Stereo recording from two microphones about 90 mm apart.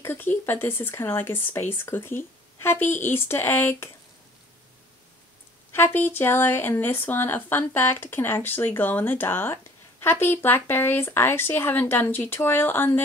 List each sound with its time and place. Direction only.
0.0 s speech: 25° left (ahead or behind)
5.7 s speech: 25° left (ahead or behind)